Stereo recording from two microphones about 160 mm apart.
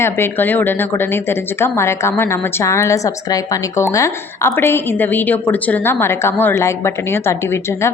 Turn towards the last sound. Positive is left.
turn(degrees=15)  # may be behind; listen again after turning